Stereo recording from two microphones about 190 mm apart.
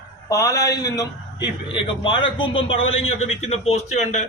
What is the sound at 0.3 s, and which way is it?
A man's voice, 15° left (ahead or behind).